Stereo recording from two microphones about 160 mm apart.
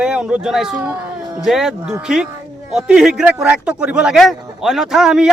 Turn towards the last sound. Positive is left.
turn(degrees=-5)  # may be behind; listen again after turning